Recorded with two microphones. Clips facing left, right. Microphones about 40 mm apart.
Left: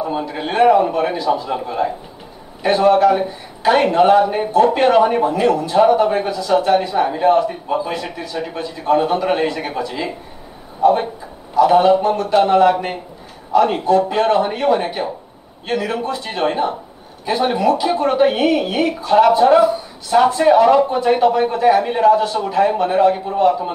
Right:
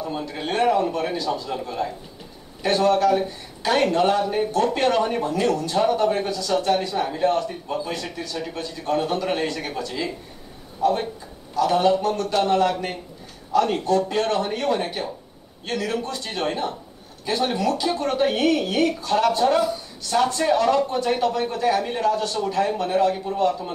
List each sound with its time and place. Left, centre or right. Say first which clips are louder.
0.0 s speech: left 6 dB; centre
10.8 s a sound: left 7 dB; centre
11.5 s speech: left 7 dB; centre